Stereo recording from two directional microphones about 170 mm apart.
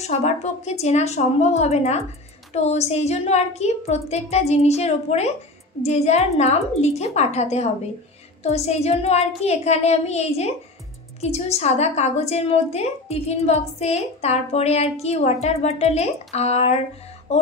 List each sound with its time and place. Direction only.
0.0 s a woman's voice: 40° left (ahead or behind)